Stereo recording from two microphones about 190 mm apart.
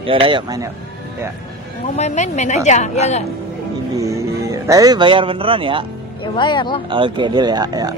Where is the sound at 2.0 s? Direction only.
40° left (ahead or behind).